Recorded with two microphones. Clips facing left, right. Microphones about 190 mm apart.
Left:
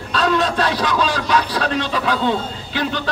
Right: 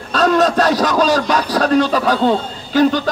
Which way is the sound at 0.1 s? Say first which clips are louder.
Right 5 dB; 45° right (ahead or behind).